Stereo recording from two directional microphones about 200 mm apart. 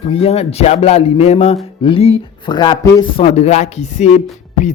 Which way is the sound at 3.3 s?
35° left (ahead or behind).